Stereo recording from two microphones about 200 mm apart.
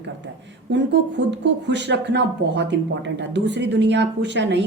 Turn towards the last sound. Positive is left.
turn(degrees=-60)  # may be behind; listen again after turning